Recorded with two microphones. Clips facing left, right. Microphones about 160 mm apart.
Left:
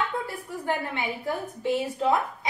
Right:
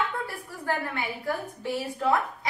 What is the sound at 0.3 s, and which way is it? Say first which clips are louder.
A woman's voice: left 2 dB; 20° left (ahead or behind).